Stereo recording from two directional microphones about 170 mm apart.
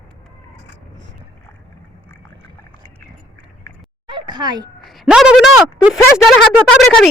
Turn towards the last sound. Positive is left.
turn(degrees=0)  # may be behind; listen again after turning